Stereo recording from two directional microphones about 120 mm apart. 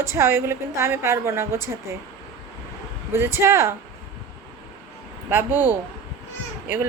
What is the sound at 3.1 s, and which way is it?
Speech, 20° right (ahead or behind).